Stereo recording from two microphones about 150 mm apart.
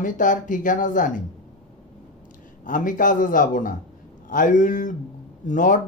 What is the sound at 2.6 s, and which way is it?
Speech, 60° left (ahead or behind).